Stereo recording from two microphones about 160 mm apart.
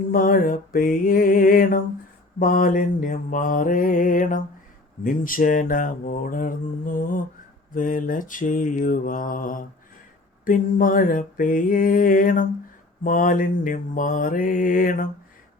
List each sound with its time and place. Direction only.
0.1 s speech: 60° left (ahead or behind)